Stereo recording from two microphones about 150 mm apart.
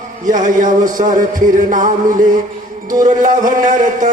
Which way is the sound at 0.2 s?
60° right (ahead or behind).